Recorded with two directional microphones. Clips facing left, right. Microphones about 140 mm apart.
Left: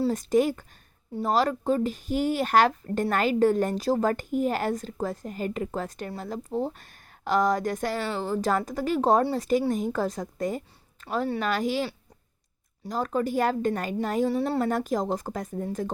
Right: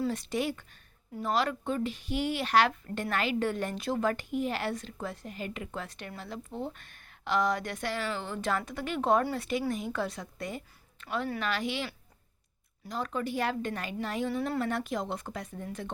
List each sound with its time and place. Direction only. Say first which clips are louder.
0.0 s speech: left 8 dB; 45° left (ahead or behind)